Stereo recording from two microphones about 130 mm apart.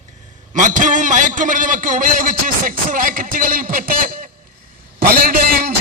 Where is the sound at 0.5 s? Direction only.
85° right.